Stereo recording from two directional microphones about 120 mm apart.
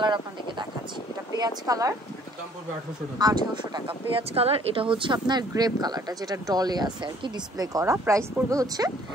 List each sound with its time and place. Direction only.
0.0 s speech: 40° right (ahead or behind)
3.2 s speech: 35° right (ahead or behind)
4.1 s speech: 55° right (ahead or behind); by 8.9 s 30° right (ahead or behind)